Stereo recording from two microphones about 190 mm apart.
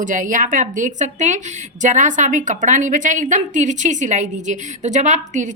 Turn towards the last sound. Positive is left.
turn(degrees=-40)  # may be behind; listen again after turning